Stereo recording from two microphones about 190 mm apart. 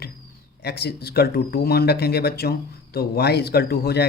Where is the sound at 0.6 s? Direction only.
60° left (ahead or behind).